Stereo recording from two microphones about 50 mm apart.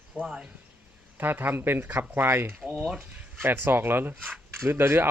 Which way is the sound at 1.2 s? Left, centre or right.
Right.